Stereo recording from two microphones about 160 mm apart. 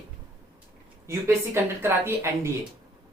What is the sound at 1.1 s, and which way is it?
Speech, 15° right (ahead or behind).